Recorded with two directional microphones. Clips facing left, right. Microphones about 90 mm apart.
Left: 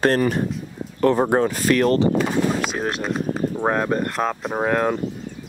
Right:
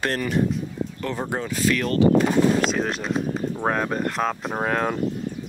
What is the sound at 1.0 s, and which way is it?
Speech, 50° left (ahead or behind).